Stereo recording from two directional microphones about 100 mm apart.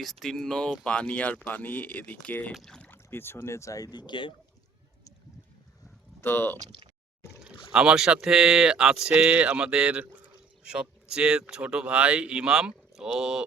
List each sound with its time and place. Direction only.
0.0 s speech: centre (ahead or behind)
2.5 s speech: 5° left (ahead or behind)
2.9 s speech: 20° left (ahead or behind)
4.0 s speech: 55° left (ahead or behind)
6.2 s speech: 20° left (ahead or behind)
7.7 s speech: 10° right (ahead or behind)